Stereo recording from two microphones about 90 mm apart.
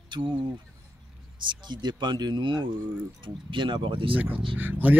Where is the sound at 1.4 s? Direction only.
60° right (ahead or behind).